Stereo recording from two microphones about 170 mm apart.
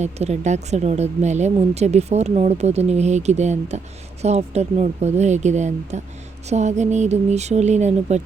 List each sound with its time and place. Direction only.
0.0 s speech: 40° right (ahead or behind)